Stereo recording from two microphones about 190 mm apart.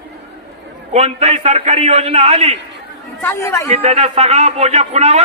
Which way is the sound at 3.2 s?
10° left (ahead or behind).